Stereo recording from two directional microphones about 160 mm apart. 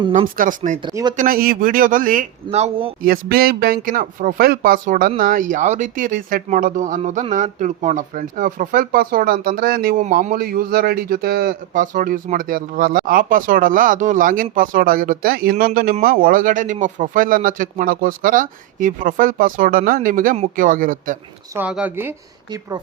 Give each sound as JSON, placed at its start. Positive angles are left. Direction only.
{"t": 0.1, "sound": "speech", "side_deg": -55}
{"t": 0.8, "sound": "speech", "side_deg": -30}
{"t": 1.1, "sound": "speech", "side_deg": -60}
{"t": 2.5, "sound": "speech", "side_deg": -40}
{"t": 3.0, "sound": "speech", "side_deg": -65}
{"t": 21.5, "sound": "speech", "side_deg": -10}